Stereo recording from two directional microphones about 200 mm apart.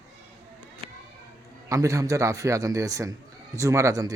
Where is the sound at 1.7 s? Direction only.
15° right (ahead or behind).